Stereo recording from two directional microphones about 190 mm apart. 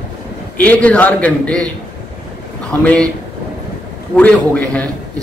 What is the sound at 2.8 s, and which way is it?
Speech, 5° left (ahead or behind).